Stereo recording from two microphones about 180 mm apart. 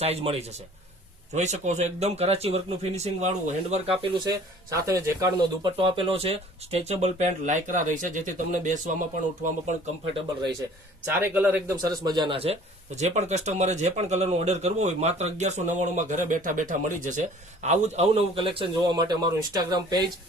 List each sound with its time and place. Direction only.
0.0 s speech: 35° right (ahead or behind); by 5.7 s 20° right (ahead or behind)
5.7 s speech: 30° right (ahead or behind); by 9.7 s 45° right (ahead or behind)
11.0 s a man's voice: 10° right (ahead or behind)
11.8 s speech: 25° right (ahead or behind)